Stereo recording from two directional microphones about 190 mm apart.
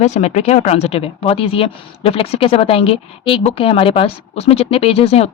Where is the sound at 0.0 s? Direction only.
35° left (ahead or behind).